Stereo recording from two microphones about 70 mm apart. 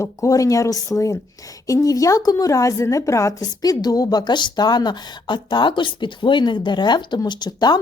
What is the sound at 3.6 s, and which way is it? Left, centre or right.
Speech, left.